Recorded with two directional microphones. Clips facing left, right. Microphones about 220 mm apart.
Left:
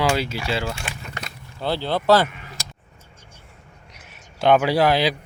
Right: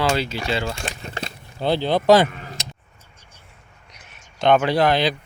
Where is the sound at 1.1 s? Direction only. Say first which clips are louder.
Right 4 dB; 25° right (ahead or behind).